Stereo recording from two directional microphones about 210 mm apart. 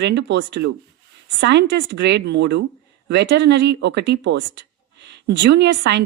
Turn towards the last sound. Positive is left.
turn(degrees=-55)  # may be behind; listen again after turning